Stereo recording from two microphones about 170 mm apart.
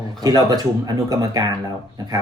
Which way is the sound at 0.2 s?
25° right (ahead or behind).